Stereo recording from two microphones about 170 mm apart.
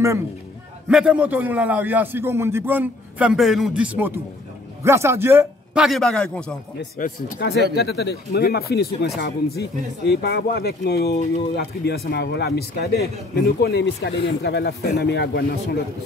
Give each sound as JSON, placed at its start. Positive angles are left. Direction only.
{"t": 0.8, "sound": "a man's voice", "side_deg": -5}
{"t": 5.9, "sound": "a man's voice", "side_deg": 0}
{"t": 7.0, "sound": "speech", "side_deg": 50}
{"t": 7.4, "sound": "speech", "side_deg": 75}